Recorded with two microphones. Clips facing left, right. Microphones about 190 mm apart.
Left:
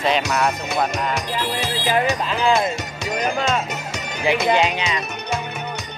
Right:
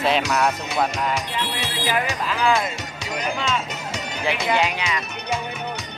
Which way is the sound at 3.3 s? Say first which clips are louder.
Left 3 dB; 50° left (ahead or behind).